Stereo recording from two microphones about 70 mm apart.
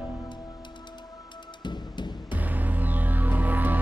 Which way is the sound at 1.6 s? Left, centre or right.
Left.